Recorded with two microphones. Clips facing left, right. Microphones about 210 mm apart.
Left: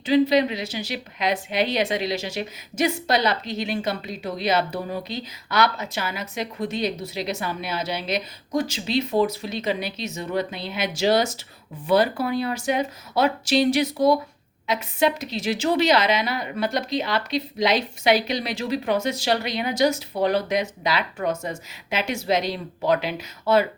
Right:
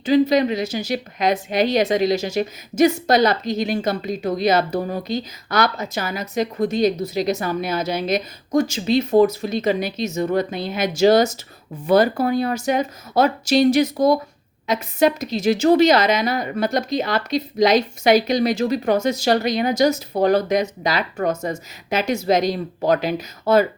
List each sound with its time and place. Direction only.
0.0 s a woman's voice: 45° right (ahead or behind)